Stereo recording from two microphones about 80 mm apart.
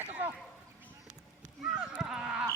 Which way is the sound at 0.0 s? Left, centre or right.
Right.